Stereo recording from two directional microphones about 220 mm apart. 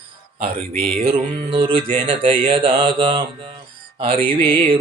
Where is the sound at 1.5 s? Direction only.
20° right (ahead or behind).